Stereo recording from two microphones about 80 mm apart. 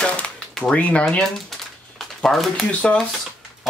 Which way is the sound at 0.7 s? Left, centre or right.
Centre.